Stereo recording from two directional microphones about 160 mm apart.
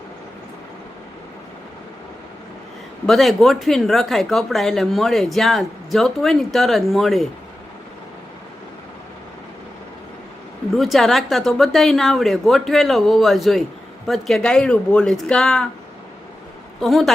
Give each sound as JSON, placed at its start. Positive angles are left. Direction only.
{"t": 3.1, "sound": "speech", "side_deg": 0}
{"t": 10.7, "sound": "speech", "side_deg": 0}
{"t": 16.8, "sound": "speech", "side_deg": 0}